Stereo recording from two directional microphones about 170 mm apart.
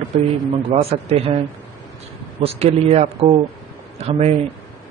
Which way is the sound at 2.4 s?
35° right (ahead or behind).